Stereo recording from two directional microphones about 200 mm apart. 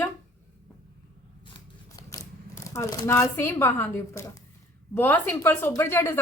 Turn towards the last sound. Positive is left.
turn(degrees=10)  # may be behind; listen again after turning